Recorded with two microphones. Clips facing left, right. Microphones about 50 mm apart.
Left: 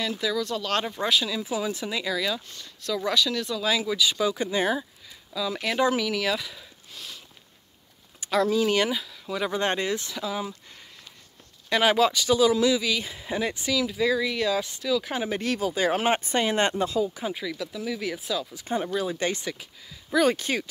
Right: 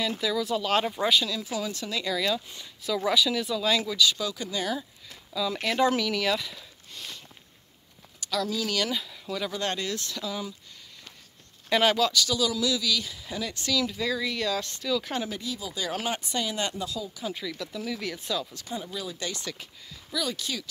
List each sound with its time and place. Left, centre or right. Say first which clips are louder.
0.0 s speech: left 1 dB; centre
1.2 s speech: left 3 dB; centre
2.1 s speech: right 3 dB; centre
2.4 s speech: even; centre; by 4.8 s left
5.3 s speech: even; centre
8.2 s speech: left 7 dB; left
8.9 s speech: left 1 dB; centre
9.3 s speech: left 4 dB; left
11.7 s speech: left 2 dB; centre; by 13.6 s left
13.6 s speech: right 1 dB; centre
15.2 s speech: left 8 dB; left
15.7 s speech: left 6 dB; left
17.3 s speech: left 3 dB; centre
18.7 s speech: left 11 dB; left